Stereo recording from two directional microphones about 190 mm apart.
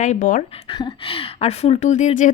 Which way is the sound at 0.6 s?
25° left (ahead or behind).